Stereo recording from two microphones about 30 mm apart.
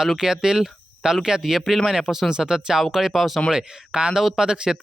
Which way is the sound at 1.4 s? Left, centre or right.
Centre.